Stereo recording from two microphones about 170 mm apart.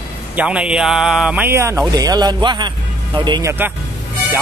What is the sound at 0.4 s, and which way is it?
Speech, 5° right (ahead or behind).